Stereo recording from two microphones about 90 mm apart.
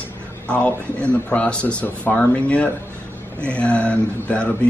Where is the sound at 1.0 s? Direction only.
15° left (ahead or behind).